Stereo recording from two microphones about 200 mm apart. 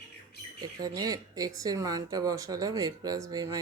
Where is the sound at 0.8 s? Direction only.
20° right (ahead or behind).